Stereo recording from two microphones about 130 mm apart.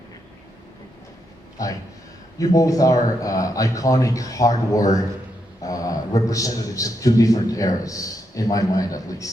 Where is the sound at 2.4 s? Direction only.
25° left (ahead or behind).